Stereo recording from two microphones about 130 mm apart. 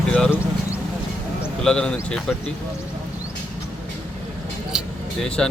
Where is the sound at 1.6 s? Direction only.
5° left (ahead or behind).